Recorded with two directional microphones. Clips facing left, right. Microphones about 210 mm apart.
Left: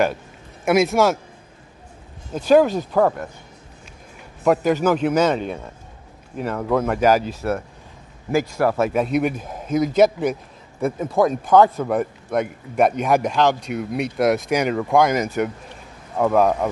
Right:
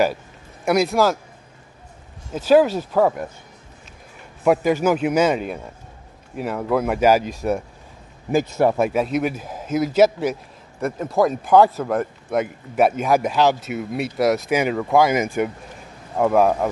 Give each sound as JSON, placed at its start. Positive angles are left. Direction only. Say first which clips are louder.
{"t": 0.7, "sound": "speech", "louder": "left 1 dB", "side_deg": 0}
{"t": 2.3, "sound": "speech", "louder": "even", "side_deg": -5}
{"t": 4.8, "sound": "a man's voice", "louder": "even", "side_deg": -10}
{"t": 8.9, "sound": "speech", "louder": "left 1 dB", "side_deg": 0}